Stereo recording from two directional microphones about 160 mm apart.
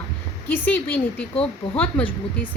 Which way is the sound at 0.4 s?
10° left (ahead or behind).